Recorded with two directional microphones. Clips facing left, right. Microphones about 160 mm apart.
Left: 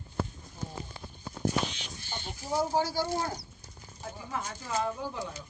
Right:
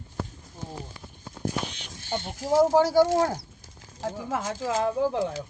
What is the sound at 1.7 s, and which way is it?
Speech, 60° right (ahead or behind).